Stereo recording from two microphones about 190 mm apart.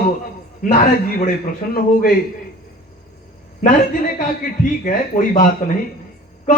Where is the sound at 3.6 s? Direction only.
45° left (ahead or behind).